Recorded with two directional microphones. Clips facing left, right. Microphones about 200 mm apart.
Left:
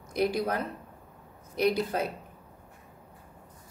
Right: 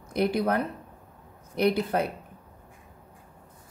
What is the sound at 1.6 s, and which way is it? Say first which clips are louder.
Speech: right 2 dB; 60° right (ahead or behind).